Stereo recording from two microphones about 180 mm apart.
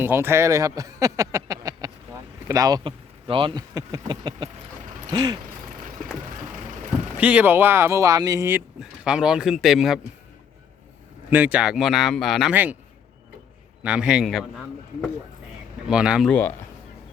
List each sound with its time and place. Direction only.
0.0 s speech: 10° right (ahead or behind)
5.1 s a sound: 25° right (ahead or behind)
7.2 s speech: 10° right (ahead or behind)
11.3 s speech: 10° right (ahead or behind)
13.8 s speech: 5° right (ahead or behind)
15.9 s speech: 5° right (ahead or behind)
16.3 s speech: 10° left (ahead or behind)